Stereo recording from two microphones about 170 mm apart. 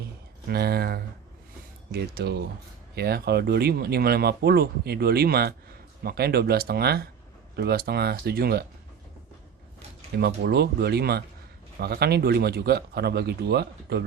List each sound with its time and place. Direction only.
0.4 s speech: 65° right (ahead or behind)
10.2 s speech: 70° right (ahead or behind)